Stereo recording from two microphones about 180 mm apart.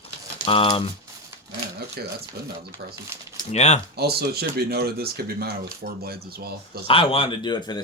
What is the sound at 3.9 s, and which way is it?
Speech, 60° right (ahead or behind).